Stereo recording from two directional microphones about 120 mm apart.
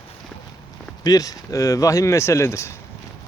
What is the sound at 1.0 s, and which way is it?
Speech, 30° left (ahead or behind).